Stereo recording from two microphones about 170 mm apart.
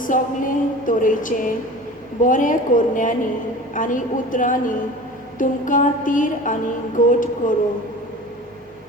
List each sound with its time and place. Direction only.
0.0 s music: 50° left (ahead or behind)